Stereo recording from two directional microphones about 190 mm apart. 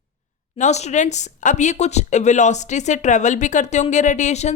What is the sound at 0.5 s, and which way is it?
Speech, 35° left (ahead or behind).